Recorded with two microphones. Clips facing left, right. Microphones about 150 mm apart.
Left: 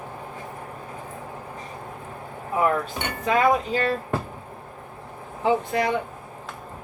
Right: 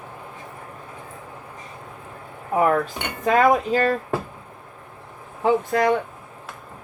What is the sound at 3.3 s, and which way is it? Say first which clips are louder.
Cutlery: right 3 dB; 50° right (ahead or behind).